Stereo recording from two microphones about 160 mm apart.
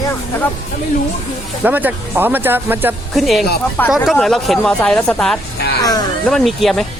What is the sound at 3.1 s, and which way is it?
Speech, centre (ahead or behind).